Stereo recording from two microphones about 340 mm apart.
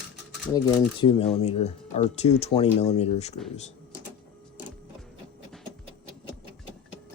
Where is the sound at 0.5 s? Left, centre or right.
Centre.